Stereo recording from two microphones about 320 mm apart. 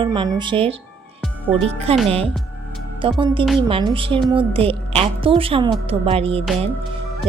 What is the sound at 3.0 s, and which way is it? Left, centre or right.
A woman's voice, centre.